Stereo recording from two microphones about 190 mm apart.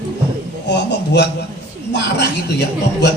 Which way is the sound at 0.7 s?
60° left (ahead or behind).